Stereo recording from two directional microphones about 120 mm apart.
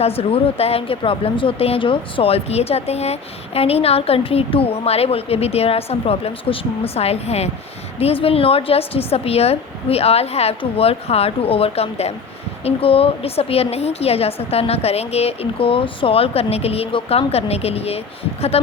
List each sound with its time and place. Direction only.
0.0 s speech: 55° left (ahead or behind)